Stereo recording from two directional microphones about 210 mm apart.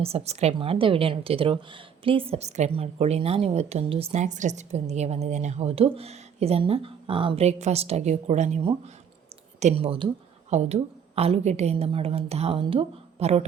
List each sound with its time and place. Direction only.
0.0 s a woman's voice: 30° right (ahead or behind)